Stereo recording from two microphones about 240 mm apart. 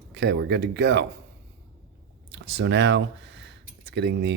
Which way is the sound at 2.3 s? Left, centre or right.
Right.